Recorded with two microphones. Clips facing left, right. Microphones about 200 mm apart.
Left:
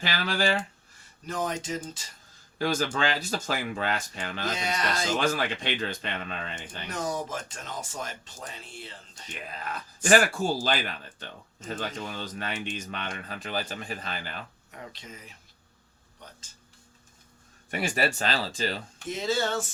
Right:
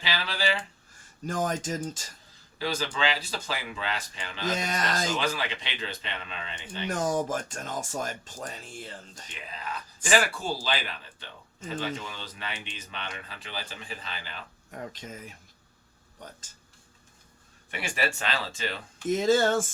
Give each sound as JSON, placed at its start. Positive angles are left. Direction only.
{"t": 0.0, "sound": "speech", "side_deg": 45}
{"t": 1.3, "sound": "speech", "side_deg": -45}
{"t": 2.6, "sound": "speech", "side_deg": 50}
{"t": 4.4, "sound": "speech", "side_deg": -45}
{"t": 5.1, "sound": "speech", "side_deg": 45}
{"t": 6.8, "sound": "speech", "side_deg": -45}
{"t": 9.3, "sound": "speech", "side_deg": 45}
{"t": 14.7, "sound": "speech", "side_deg": -45}
{"t": 17.7, "sound": "speech", "side_deg": 40}
{"t": 19.0, "sound": "speech", "side_deg": -45}